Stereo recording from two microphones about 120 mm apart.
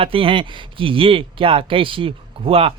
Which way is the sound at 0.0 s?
50° right (ahead or behind).